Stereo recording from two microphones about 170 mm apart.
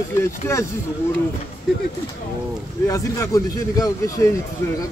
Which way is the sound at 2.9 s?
20° left (ahead or behind).